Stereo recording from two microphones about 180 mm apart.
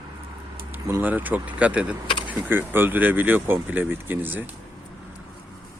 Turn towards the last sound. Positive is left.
turn(degrees=-10)  # may be behind; listen again after turning